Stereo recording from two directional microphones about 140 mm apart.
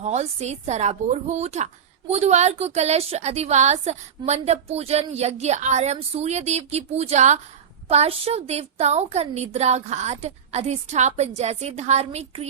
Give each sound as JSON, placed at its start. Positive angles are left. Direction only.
{"t": 0.0, "sound": "a woman's voice", "side_deg": -50}